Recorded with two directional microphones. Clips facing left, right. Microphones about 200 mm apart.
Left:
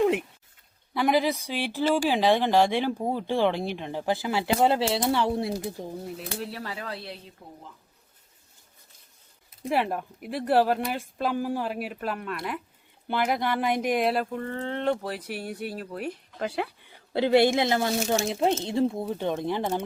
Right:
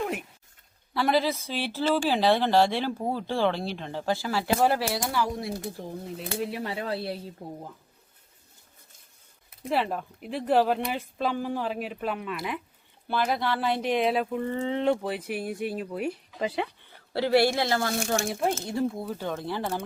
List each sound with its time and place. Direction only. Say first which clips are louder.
0.9 s speech: left 1 dB; 15° left (ahead or behind)
6.5 s speech: right 5 dB; 25° right (ahead or behind)
9.6 s speech: left 1 dB; 10° left (ahead or behind)
13.1 s speech: left 1 dB; 15° left (ahead or behind); by 16.7 s centre (ahead or behind)
16.9 s speech: left 2 dB; 20° left (ahead or behind)